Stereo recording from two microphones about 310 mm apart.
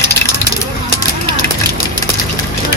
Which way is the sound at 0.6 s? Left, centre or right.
Left.